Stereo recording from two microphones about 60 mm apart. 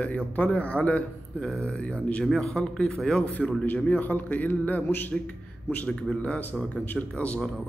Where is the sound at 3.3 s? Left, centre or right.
Left.